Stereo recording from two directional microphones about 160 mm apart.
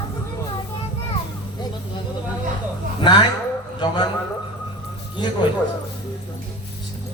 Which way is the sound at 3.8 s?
25° left (ahead or behind).